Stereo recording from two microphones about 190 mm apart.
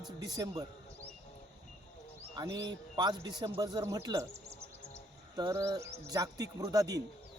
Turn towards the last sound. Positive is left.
turn(degrees=-20)  # may be behind; listen again after turning